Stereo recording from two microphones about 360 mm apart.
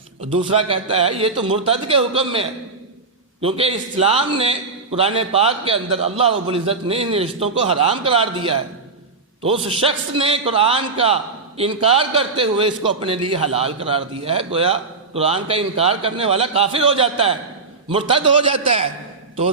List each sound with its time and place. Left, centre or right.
0.3 s a man's voice: centre